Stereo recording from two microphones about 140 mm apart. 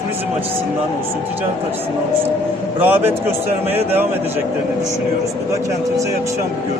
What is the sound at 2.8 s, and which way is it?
Speech, 15° right (ahead or behind).